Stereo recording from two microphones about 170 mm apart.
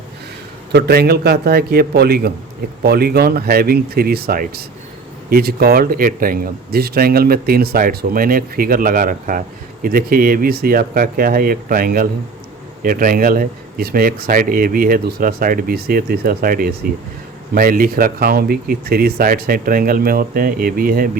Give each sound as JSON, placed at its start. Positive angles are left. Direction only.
{"t": 0.7, "sound": "a man's voice", "side_deg": -70}